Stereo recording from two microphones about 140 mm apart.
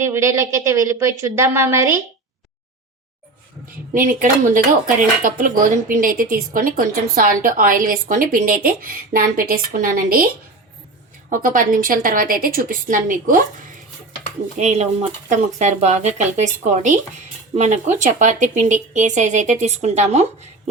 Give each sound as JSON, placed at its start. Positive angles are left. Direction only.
{"t": 0.0, "sound": "speech", "side_deg": -20}
{"t": 3.9, "sound": "a woman's voice", "side_deg": -65}
{"t": 11.3, "sound": "a woman's voice", "side_deg": -70}
{"t": 14.6, "sound": "speech", "side_deg": -55}